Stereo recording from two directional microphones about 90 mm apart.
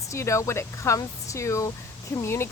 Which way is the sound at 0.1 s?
35° left (ahead or behind).